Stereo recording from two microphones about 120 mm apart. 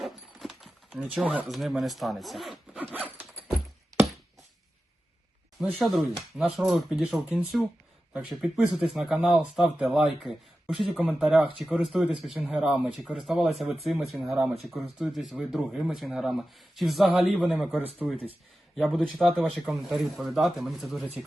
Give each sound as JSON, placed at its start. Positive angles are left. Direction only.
{"t": 0.0, "sound": "clip-clop", "side_deg": 0}
{"t": 0.9, "sound": "speech", "side_deg": -10}
{"t": 1.5, "sound": "speech", "side_deg": 0}
{"t": 2.9, "sound": "horse", "side_deg": -15}
{"t": 5.8, "sound": "speech", "side_deg": 0}